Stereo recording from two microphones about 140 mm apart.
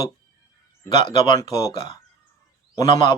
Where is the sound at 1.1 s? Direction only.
30° left (ahead or behind).